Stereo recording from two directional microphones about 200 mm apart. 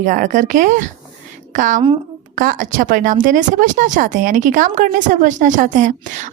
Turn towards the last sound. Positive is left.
turn(degrees=-40)  # may be behind; listen again after turning